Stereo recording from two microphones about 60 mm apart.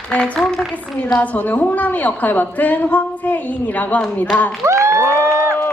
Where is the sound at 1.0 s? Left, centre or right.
Left.